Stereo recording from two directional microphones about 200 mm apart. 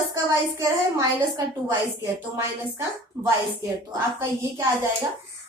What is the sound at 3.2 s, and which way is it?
A woman's voice, 15° right (ahead or behind).